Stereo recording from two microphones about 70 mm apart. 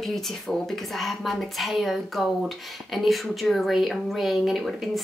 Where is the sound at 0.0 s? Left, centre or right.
Centre.